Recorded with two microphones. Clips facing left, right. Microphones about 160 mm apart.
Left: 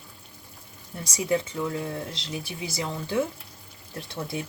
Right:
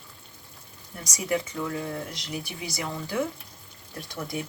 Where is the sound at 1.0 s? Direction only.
30° left (ahead or behind).